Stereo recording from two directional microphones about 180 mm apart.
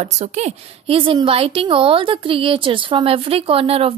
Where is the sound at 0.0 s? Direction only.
40° right (ahead or behind).